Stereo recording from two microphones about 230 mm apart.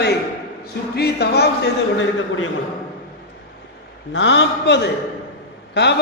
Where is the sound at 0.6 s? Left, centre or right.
Left.